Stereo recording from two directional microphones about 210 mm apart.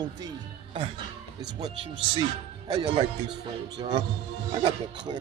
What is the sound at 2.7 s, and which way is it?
Speech, 25° right (ahead or behind).